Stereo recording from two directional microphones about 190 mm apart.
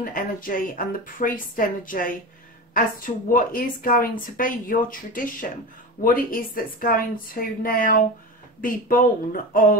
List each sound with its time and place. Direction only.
0.0 s speech: 45° left (ahead or behind)
3.3 s speech: 45° left (ahead or behind)